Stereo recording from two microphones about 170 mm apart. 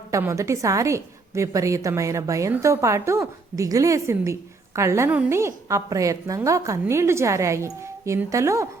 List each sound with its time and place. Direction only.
0.1 s a woman's voice: 15° right (ahead or behind)